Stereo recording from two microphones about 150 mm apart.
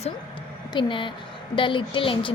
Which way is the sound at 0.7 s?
35° left (ahead or behind).